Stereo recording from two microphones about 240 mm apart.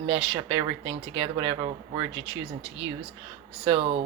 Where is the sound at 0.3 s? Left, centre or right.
Right.